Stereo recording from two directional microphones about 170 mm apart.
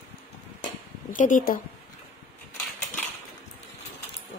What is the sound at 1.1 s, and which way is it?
Speech, 50° left (ahead or behind).